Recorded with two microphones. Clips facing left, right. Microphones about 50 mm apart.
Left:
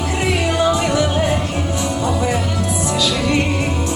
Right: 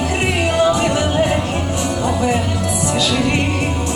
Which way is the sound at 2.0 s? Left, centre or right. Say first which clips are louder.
Right 2 dB; right.